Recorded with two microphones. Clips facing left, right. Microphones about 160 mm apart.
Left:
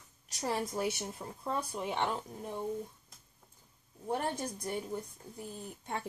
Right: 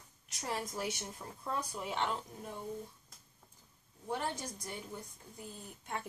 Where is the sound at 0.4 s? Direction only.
30° left (ahead or behind).